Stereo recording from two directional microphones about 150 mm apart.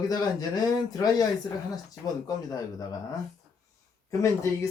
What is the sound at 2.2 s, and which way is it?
Speech, 25° left (ahead or behind).